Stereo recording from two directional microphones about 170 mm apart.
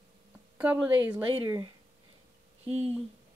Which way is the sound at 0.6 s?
10° right (ahead or behind).